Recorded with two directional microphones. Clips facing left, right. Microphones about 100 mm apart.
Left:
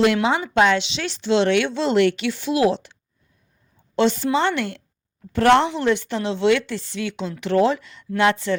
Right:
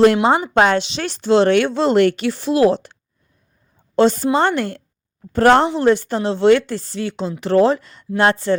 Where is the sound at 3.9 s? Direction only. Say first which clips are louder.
Right 4 dB; 40° right (ahead or behind).